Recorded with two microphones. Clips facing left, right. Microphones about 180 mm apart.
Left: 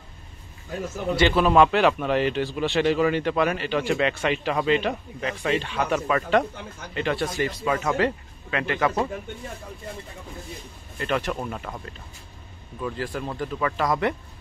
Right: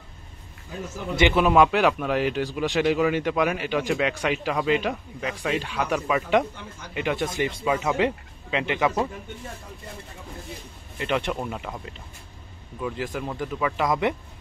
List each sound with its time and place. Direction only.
1.2 s a man's voice: 10° right (ahead or behind)
11.0 s a man's voice: 20° right (ahead or behind)